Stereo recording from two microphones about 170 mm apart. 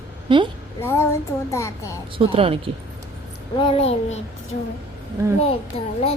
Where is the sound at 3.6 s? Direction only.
35° left (ahead or behind).